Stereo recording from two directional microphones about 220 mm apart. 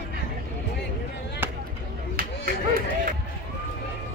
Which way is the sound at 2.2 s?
45° right (ahead or behind).